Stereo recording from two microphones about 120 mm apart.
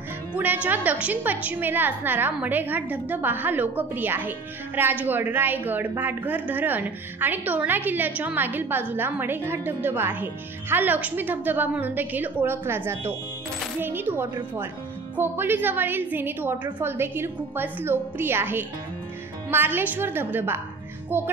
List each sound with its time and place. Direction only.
0.7 s a woman's voice: 15° right (ahead or behind)